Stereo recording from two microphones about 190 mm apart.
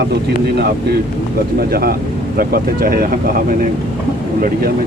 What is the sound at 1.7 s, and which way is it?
Speech, 55° right (ahead or behind).